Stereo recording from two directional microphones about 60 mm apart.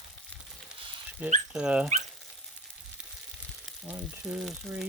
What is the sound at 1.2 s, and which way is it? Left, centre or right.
Speech, right.